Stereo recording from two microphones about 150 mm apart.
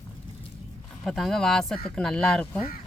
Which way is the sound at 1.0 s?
Centre (ahead or behind).